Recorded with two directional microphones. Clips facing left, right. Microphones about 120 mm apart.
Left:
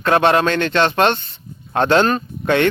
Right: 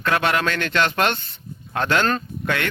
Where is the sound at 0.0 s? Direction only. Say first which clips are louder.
Left 6 dB; 30° left (ahead or behind).